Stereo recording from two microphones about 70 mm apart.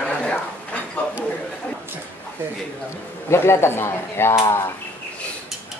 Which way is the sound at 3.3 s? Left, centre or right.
Left.